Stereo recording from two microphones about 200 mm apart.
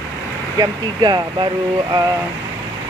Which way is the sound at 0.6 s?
20° right (ahead or behind).